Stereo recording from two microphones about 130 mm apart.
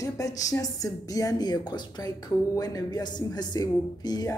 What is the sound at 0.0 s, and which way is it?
A woman's voice, 25° left (ahead or behind).